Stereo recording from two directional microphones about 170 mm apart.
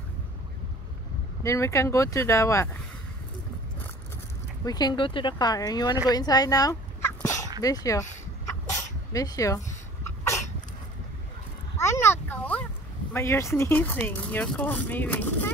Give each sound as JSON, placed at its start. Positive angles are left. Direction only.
{"t": 1.4, "sound": "speech", "side_deg": 15}
{"t": 4.6, "sound": "speech", "side_deg": 25}
{"t": 7.2, "sound": "dog", "side_deg": 15}
{"t": 7.6, "sound": "speech", "side_deg": 20}
{"t": 8.7, "sound": "sneeze", "side_deg": 20}
{"t": 9.7, "sound": "a sound", "side_deg": 15}
{"t": 11.8, "sound": "a sound", "side_deg": 15}
{"t": 13.1, "sound": "speech", "side_deg": 15}